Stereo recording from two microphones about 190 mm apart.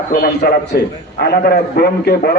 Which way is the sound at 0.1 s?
50° left (ahead or behind).